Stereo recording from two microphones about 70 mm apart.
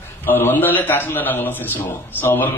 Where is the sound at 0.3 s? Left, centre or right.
Left.